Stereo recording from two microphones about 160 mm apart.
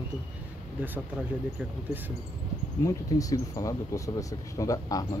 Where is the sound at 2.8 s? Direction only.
20° left (ahead or behind).